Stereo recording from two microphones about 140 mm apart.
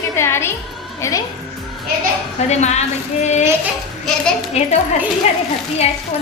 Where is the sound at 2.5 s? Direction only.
55° left (ahead or behind).